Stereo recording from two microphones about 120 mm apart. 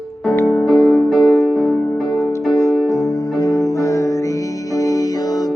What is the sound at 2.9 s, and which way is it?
Music, 25° left (ahead or behind).